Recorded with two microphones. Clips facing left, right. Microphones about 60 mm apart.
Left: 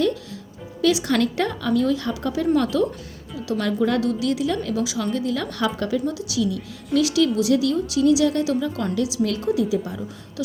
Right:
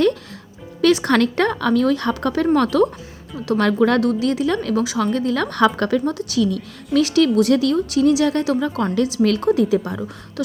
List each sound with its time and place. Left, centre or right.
0.0 s music: right
0.8 s a woman's voice: right
4.0 s a woman's voice: right